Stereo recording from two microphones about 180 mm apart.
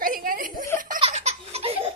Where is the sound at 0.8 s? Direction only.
30° right (ahead or behind).